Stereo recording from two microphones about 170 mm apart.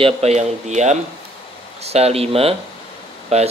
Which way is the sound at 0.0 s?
40° right (ahead or behind).